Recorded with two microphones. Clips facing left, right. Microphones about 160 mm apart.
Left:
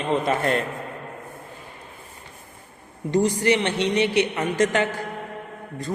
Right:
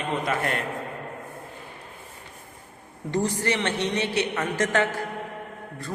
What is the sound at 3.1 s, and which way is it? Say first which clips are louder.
A woman's voice: left 5 dB; 15° left (ahead or behind).